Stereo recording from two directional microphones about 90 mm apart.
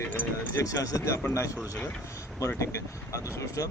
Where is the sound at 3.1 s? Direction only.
35° left (ahead or behind).